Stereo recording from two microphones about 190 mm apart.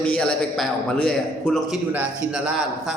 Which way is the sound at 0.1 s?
5° left (ahead or behind).